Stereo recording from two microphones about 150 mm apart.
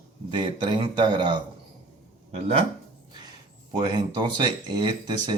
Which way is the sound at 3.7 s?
30° right (ahead or behind).